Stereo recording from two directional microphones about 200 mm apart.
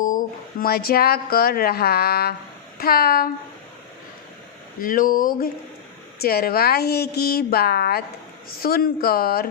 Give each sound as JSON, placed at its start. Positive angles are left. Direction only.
{"t": 0.0, "sound": "speech", "side_deg": 45}
{"t": 4.8, "sound": "speech", "side_deg": 45}